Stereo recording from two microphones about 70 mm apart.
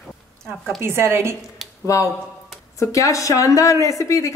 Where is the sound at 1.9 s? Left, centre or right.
Left.